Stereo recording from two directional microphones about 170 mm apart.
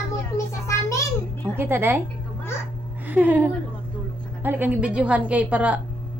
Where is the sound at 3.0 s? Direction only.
10° right (ahead or behind).